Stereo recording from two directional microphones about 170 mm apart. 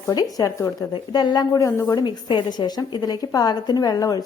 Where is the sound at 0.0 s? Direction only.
20° left (ahead or behind).